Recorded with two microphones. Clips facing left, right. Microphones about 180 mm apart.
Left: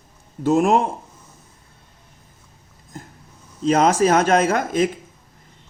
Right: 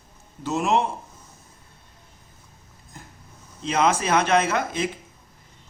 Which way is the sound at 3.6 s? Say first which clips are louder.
Left 6 dB; 45° left (ahead or behind).